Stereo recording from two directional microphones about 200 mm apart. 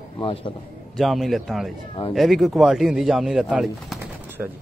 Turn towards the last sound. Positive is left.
turn(degrees=-5)  # may be behind; listen again after turning